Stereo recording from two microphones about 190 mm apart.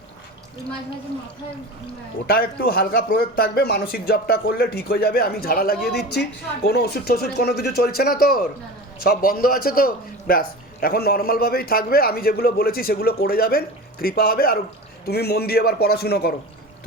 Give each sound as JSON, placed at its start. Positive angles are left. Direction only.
{"t": 2.2, "sound": "a man's voice", "side_deg": 50}